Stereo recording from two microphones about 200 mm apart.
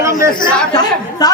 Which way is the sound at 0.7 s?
20° left (ahead or behind).